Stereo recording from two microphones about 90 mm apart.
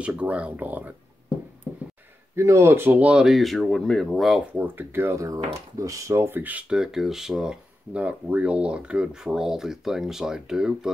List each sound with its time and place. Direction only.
0.0 s speech: 15° right (ahead or behind)
2.3 s speech: 30° right (ahead or behind); by 3.3 s 15° right (ahead or behind)
3.3 s speech: centre (ahead or behind)
4.6 s speech: 20° right (ahead or behind)
6.7 s speech: 5° right (ahead or behind)